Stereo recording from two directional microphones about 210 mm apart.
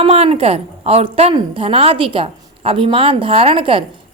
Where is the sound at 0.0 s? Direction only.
30° right (ahead or behind).